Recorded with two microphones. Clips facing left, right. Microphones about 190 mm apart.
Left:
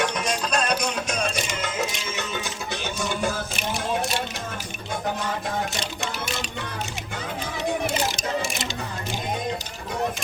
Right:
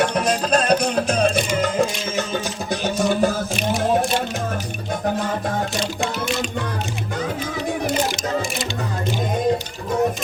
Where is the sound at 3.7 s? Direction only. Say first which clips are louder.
Right 8 dB; 45° right (ahead or behind).